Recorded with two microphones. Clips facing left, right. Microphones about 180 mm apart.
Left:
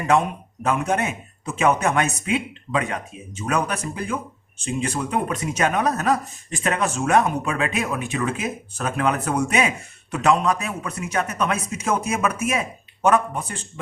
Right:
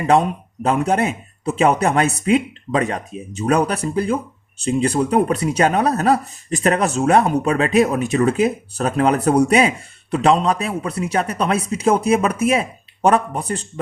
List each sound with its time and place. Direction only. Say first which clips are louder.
0.1 s speech: right 4 dB; 30° right (ahead or behind)